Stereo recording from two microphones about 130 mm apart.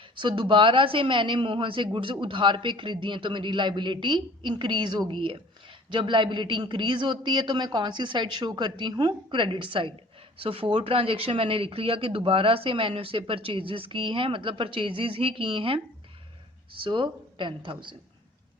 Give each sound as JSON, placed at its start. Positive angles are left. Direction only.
{"t": 0.2, "sound": "a man's voice", "side_deg": -40}
{"t": 16.8, "sound": "a man's voice", "side_deg": -40}